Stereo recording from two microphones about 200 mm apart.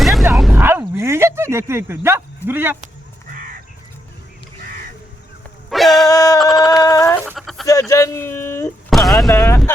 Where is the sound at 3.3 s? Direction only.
45° right (ahead or behind).